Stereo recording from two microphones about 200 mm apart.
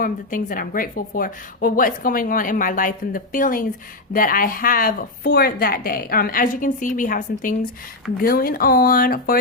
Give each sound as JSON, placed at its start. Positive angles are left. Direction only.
{"t": 0.0, "sound": "a woman's voice", "side_deg": 45}